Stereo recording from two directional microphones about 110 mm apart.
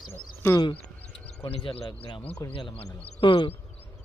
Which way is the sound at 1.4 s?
60° left (ahead or behind).